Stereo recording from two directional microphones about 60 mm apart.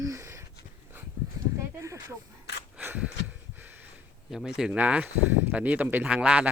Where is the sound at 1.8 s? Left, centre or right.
Right.